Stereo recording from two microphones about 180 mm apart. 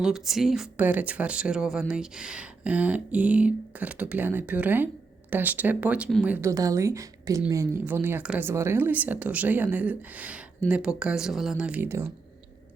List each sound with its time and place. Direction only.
0.0 s a woman's voice: centre (ahead or behind)